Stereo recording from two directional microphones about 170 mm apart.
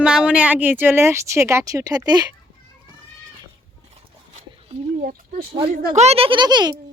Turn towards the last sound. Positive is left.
turn(degrees=-25)  # may be behind; listen again after turning